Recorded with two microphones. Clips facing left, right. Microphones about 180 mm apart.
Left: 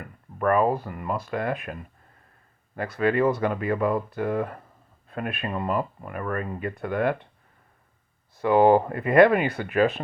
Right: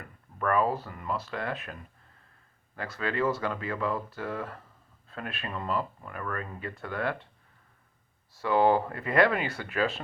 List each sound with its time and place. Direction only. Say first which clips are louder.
0.0 s a sound: left 6 dB; 50° left (ahead or behind)
0.9 s speech: left 5 dB; 55° left (ahead or behind)
2.7 s speech: left 8 dB; 55° left (ahead or behind)
8.3 s speech: left 6 dB; 55° left (ahead or behind)